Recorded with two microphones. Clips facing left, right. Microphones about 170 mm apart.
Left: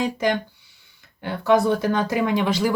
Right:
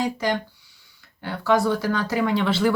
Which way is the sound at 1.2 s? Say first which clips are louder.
Left 2 dB; 20° left (ahead or behind).